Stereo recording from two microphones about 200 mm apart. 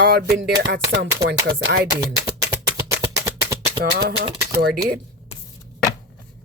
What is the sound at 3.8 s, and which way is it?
Speech, 55° right (ahead or behind).